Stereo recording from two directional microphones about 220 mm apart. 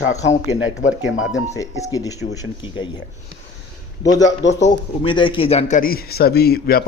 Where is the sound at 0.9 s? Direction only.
65° left (ahead or behind).